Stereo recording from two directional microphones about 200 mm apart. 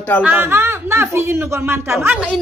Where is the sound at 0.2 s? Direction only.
10° right (ahead or behind).